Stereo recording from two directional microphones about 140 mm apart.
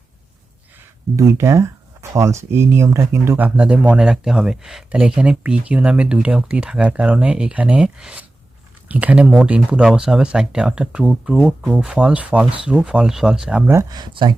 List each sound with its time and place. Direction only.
1.1 s speech: 20° right (ahead or behind)
13.7 s speech: 30° right (ahead or behind)